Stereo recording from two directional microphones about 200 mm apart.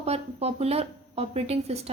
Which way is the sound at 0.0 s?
30° right (ahead or behind).